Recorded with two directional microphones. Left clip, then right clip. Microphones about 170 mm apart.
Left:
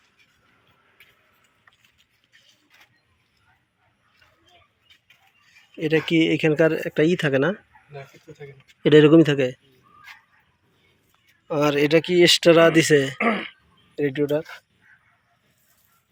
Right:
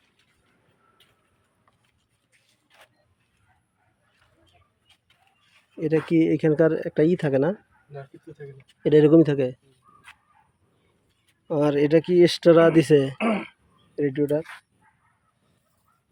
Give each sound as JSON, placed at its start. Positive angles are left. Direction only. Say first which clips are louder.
{"t": 6.1, "sound": "speech", "louder": "even", "side_deg": -20}
{"t": 8.8, "sound": "speech", "louder": "left 3 dB", "side_deg": 0}
{"t": 11.4, "sound": "speech", "louder": "left 1 dB", "side_deg": -25}